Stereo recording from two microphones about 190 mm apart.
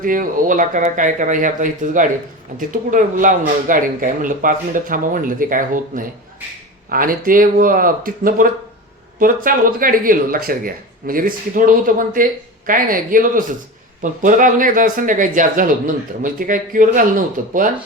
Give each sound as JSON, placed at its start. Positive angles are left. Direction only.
{"t": 0.0, "sound": "speech", "side_deg": -45}